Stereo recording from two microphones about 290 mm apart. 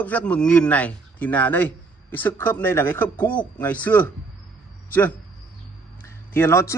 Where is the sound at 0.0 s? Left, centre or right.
Centre.